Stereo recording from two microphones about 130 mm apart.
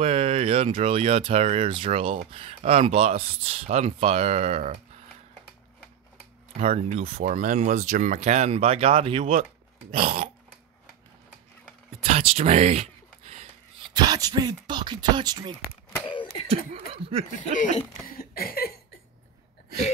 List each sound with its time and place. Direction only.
0.0 s speech: 50° right (ahead or behind)
6.6 s speech: 50° right (ahead or behind)
7.2 s speech: 80° right; by 9.2 s 50° right (ahead or behind)
9.2 s speech: 90° right
9.8 s speech: 55° right (ahead or behind)
12.0 s a sound: 50° right (ahead or behind)
13.9 s speech: 30° right (ahead or behind)
16.2 s a sound: 45° left (ahead or behind)
16.4 s speech: 50° right (ahead or behind)
17.4 s speech: 70° left (ahead or behind)